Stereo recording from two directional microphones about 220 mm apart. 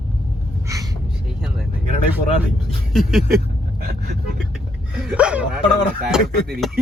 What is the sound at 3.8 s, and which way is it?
Speech, 45° right (ahead or behind).